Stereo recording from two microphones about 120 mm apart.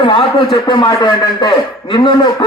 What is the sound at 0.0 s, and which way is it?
A man's voice, 45° left (ahead or behind).